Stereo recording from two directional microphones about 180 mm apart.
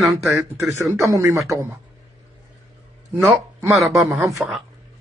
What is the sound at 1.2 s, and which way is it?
Speech, 15° right (ahead or behind).